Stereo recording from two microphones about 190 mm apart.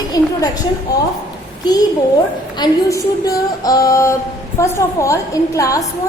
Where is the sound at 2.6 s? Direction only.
20° left (ahead or behind).